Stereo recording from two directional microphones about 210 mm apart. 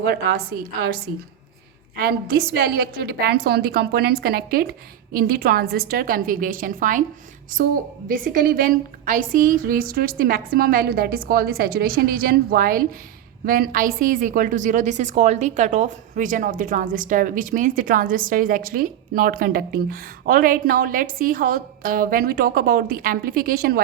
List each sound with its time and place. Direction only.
0.0 s a woman's voice: 50° right (ahead or behind)
2.0 s a woman's voice: 45° right (ahead or behind)